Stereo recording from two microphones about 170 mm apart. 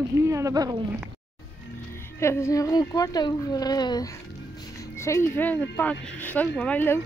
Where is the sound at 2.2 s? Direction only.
15° left (ahead or behind).